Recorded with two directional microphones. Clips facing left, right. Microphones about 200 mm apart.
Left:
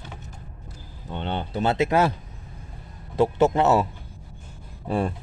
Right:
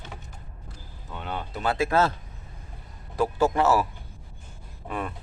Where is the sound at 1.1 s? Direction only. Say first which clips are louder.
Left 5 dB; 30° left (ahead or behind).